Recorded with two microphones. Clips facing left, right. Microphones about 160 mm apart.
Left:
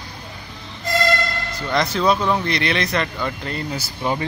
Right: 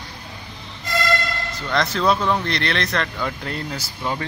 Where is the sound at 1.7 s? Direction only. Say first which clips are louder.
Left 1 dB; 5° left (ahead or behind).